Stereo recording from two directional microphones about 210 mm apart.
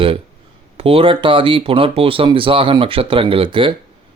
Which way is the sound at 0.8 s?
25° right (ahead or behind).